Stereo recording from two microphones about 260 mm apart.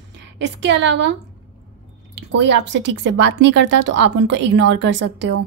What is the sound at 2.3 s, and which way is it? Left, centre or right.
Speech, right.